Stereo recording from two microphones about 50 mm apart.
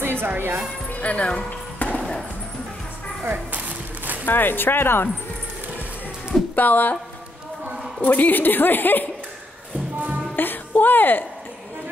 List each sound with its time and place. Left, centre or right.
0.0 s music: right
1.0 s basketball bounce: left
3.3 s a sound: right
4.3 s speech: left
6.5 s speech: left
8.0 s a woman's voice: left
10.3 s music: left